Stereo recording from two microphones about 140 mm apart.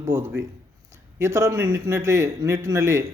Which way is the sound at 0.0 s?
20° right (ahead or behind).